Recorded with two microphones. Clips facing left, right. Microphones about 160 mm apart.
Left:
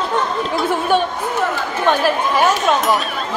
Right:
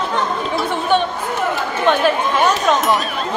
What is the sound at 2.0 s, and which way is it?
Speech, 5° left (ahead or behind).